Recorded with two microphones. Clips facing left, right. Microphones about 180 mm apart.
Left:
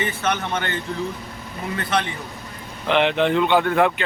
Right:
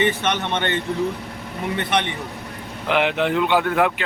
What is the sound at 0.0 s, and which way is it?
Speech, 25° right (ahead or behind).